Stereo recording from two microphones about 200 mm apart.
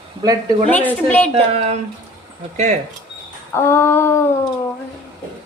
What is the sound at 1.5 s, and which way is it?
Speech, 30° right (ahead or behind).